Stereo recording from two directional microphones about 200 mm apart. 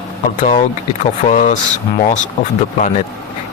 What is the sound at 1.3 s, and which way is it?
Speech, 40° left (ahead or behind).